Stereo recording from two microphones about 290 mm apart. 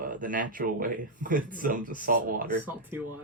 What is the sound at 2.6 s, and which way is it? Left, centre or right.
Speech, centre.